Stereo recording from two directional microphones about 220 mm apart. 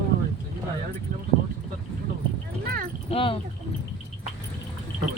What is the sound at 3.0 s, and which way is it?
Speech, 25° left (ahead or behind).